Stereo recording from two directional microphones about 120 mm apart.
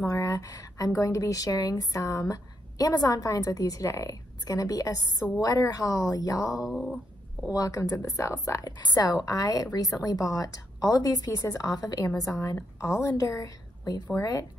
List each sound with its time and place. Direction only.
0.0 s speech: 25° left (ahead or behind)
6.7 s speech: 5° left (ahead or behind)
7.5 s a woman's voice: 30° left (ahead or behind)